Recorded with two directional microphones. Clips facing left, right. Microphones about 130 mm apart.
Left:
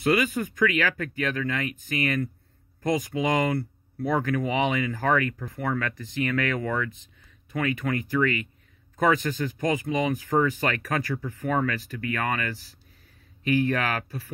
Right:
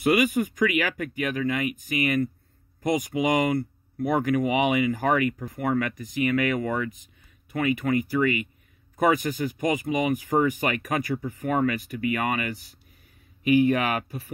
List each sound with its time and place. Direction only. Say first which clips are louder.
0.2 s speech: right 2 dB; 15° right (ahead or behind)